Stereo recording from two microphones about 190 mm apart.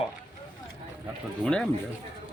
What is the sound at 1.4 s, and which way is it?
Speech, 5° left (ahead or behind).